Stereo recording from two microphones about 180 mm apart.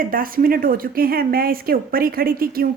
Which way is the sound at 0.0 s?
50° right (ahead or behind).